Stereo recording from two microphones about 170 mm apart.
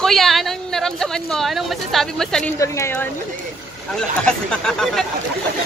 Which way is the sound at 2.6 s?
15° left (ahead or behind).